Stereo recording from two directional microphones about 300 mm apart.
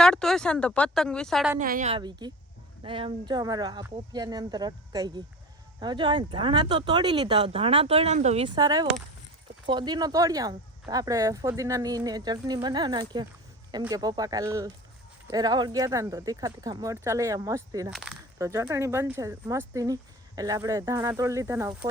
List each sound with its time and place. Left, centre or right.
0.0 s speech: centre
1.5 s a woman's voice: right; by 21.8 s centre